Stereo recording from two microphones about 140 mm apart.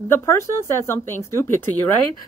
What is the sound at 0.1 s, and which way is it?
A woman's voice, 20° left (ahead or behind).